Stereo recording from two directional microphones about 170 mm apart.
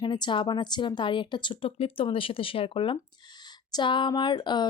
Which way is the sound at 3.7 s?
25° left (ahead or behind).